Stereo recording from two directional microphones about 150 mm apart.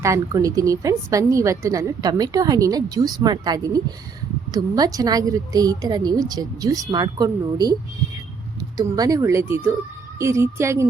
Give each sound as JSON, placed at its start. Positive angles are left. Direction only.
{"t": 0.0, "sound": "a woman's voice", "side_deg": -20}
{"t": 8.8, "sound": "a woman's voice", "side_deg": -25}